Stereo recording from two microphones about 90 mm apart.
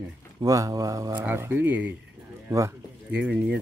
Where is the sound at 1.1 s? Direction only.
15° right (ahead or behind).